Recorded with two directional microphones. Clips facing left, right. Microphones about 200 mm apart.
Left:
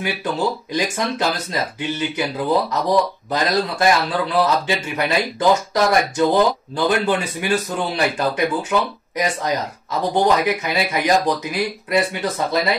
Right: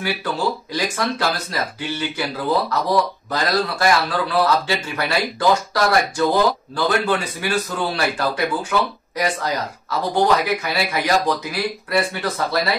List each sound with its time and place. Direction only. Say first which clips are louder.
0.7 s speech: left 3 dB; 20° left (ahead or behind)